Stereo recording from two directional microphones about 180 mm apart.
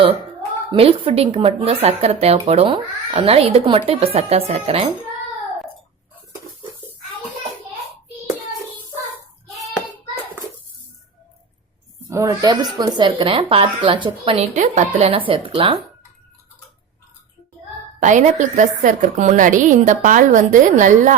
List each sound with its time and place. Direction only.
0.7 s speech: 30° right (ahead or behind)
12.0 s speech: 20° right (ahead or behind)
18.0 s a woman's voice: 45° right (ahead or behind)